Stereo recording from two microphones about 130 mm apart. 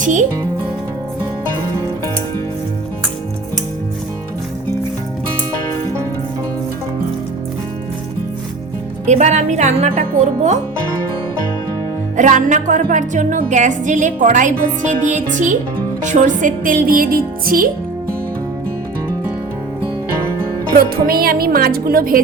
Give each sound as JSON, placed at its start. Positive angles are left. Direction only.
{"t": 0.0, "sound": "speech", "side_deg": -75}
{"t": 9.0, "sound": "speech", "side_deg": -60}
{"t": 12.1, "sound": "music", "side_deg": -75}
{"t": 21.5, "sound": "music", "side_deg": -90}